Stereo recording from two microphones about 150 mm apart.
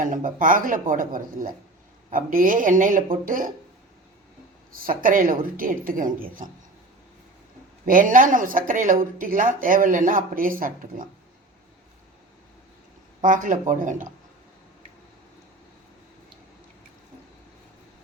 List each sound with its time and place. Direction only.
0.0 s speech: 65° right (ahead or behind)
4.8 s a woman's voice: 70° right (ahead or behind)
7.9 s speech: 65° right (ahead or behind)
13.2 s speech: 60° right (ahead or behind)